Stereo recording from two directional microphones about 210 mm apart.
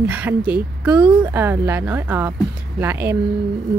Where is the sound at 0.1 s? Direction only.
10° right (ahead or behind).